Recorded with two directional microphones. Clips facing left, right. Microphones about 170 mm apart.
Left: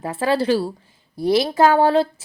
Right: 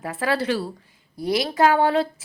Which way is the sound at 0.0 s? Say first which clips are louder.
Left 4 dB; 30° left (ahead or behind).